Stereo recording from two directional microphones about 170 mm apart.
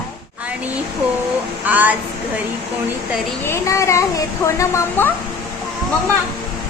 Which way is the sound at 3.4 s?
15° left (ahead or behind).